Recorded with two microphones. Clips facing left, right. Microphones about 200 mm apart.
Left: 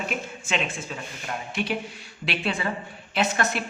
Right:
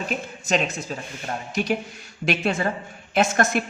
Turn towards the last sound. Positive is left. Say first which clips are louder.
# right 5 dB
turn(degrees=-45)  # may be behind; listen again after turning